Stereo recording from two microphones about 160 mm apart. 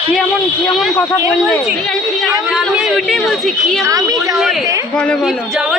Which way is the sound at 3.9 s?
20° right (ahead or behind).